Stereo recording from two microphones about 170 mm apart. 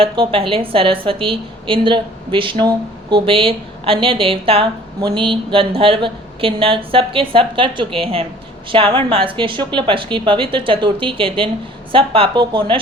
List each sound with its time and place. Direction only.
0.0 s a woman's voice: 35° right (ahead or behind)